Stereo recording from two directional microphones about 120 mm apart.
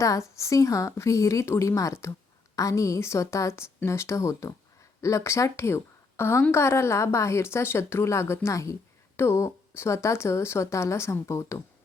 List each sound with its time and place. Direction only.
0.0 s speech: 25° left (ahead or behind)